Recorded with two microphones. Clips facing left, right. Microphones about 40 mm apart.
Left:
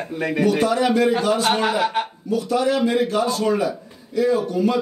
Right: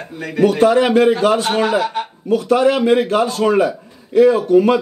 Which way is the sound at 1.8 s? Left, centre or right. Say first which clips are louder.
Even; centre.